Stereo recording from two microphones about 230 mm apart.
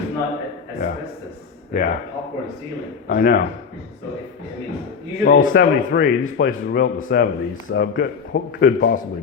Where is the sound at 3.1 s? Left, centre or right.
Left.